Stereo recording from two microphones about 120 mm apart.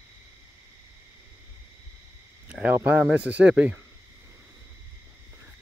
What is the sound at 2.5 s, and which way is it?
Speech, 15° right (ahead or behind).